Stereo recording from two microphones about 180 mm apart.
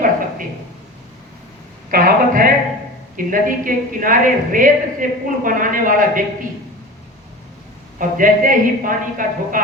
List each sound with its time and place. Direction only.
1.9 s a man's voice: 55° right (ahead or behind)
7.9 s a woman's voice: 50° right (ahead or behind)